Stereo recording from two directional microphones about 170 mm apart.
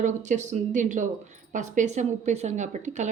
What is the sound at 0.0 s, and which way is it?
A woman's voice, 45° right (ahead or behind).